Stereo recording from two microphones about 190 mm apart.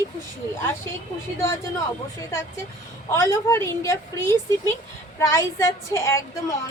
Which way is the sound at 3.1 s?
15° left (ahead or behind).